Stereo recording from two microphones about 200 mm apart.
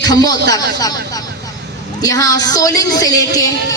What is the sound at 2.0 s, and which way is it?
A woman's voice, 20° left (ahead or behind).